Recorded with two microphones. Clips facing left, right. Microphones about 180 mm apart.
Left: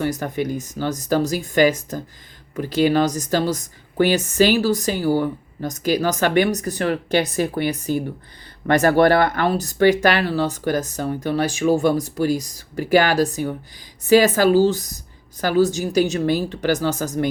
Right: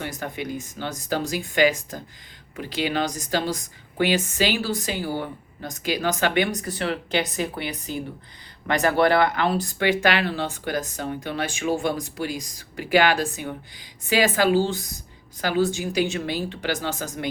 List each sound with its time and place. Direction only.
0.0 s speech: 40° left (ahead or behind)